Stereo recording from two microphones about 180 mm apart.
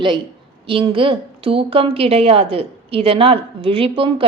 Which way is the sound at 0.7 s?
30° right (ahead or behind).